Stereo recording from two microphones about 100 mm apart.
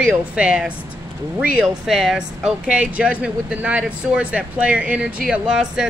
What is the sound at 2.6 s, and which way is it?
Speech, 15° right (ahead or behind).